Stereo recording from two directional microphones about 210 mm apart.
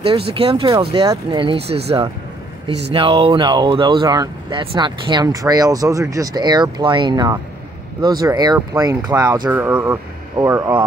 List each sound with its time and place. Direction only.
0.3 s speech: 25° right (ahead or behind)